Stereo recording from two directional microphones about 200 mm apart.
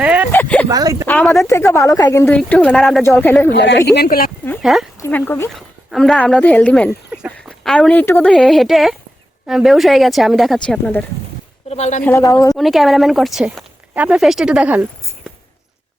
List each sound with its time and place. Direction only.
0.0 s a sound: 5° right (ahead or behind)
0.3 s a sound: 10° left (ahead or behind)
0.7 s speech: 20° right (ahead or behind)
1.0 s speech: 10° left (ahead or behind)
3.5 s speech: 60° left (ahead or behind)
4.6 s speech: centre (ahead or behind)
4.9 s speech: 10° left (ahead or behind)
11.7 s a woman's voice: 35° left (ahead or behind)
12.0 s speech: 15° left (ahead or behind)
12.5 s speech: centre (ahead or behind)